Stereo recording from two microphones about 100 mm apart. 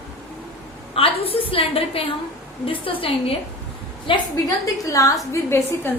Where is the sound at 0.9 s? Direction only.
70° left (ahead or behind).